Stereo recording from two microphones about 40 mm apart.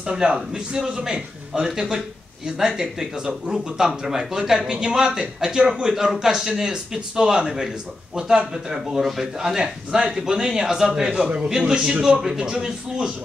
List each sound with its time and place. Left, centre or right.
0.0 s a man's voice: right